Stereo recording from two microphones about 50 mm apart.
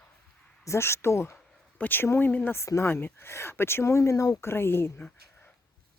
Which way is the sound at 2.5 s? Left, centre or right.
Left.